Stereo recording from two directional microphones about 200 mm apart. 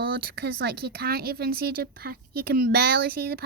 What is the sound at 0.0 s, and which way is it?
A woman's voice, 50° right (ahead or behind).